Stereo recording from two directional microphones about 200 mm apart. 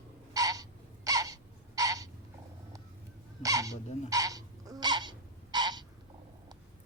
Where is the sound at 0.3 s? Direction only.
15° right (ahead or behind).